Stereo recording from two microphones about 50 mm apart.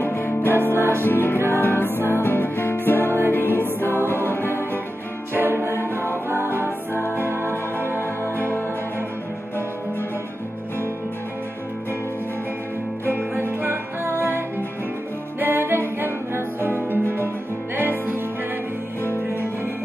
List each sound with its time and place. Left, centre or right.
0.0 s music: left
0.7 s music: right
1.0 s music: left
3.1 s music: right
3.3 s music: left
5.3 s music: right
13.4 s music: right